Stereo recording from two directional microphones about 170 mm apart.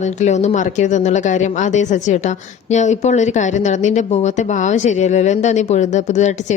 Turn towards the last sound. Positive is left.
turn(degrees=45)  # may be behind; listen again after turning